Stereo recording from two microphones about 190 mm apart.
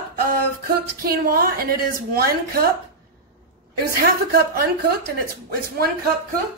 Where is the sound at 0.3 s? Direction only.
50° right (ahead or behind).